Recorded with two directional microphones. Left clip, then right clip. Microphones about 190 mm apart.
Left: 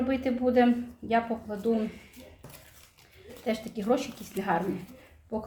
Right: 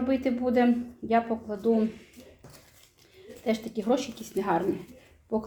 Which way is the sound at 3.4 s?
30° right (ahead or behind).